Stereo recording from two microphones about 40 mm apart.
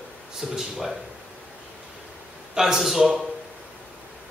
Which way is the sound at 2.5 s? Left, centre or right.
Centre.